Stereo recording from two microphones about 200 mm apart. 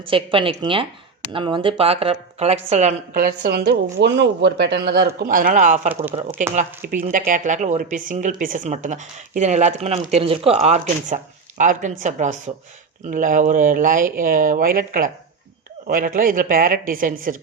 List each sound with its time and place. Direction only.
0.1 s a woman's voice: 25° right (ahead or behind); by 17.3 s 45° right (ahead or behind)